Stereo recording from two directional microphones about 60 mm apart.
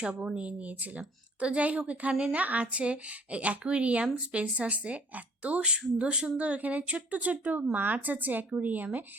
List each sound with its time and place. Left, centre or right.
0.0 s speech: centre